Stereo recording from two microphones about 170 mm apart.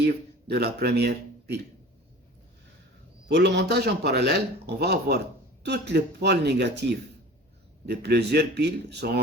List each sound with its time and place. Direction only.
0.0 s speech: 75° right (ahead or behind)
3.2 s a man's voice: 90° right